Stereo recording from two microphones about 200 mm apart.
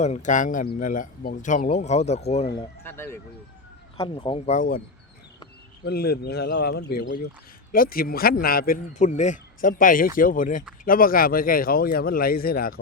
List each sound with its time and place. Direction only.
0.0 s speech: 35° left (ahead or behind)
2.8 s speech: 10° left (ahead or behind)
3.9 s speech: 25° left (ahead or behind); by 4.8 s 40° left (ahead or behind)
5.8 s a man's voice: 50° left (ahead or behind)